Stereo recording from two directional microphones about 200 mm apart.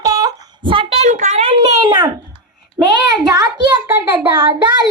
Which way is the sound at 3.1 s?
20° right (ahead or behind).